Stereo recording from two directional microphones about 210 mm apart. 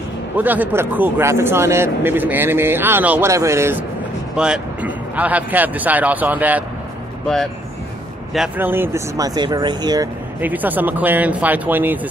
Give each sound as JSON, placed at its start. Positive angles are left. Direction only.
{"t": 0.4, "sound": "speech", "side_deg": -10}
{"t": 8.3, "sound": "speech", "side_deg": -5}
{"t": 10.4, "sound": "speech", "side_deg": -10}